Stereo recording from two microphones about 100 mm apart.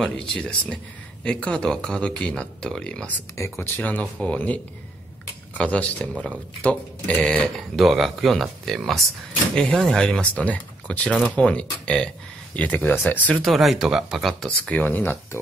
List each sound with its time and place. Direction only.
0.0 s speech: 10° left (ahead or behind)
3.3 s speech: 25° left (ahead or behind)
5.6 s speech: 10° left (ahead or behind)
7.7 s speech: centre (ahead or behind); by 13.4 s 20° left (ahead or behind)
13.4 s speech: centre (ahead or behind)
14.7 s speech: 15° left (ahead or behind)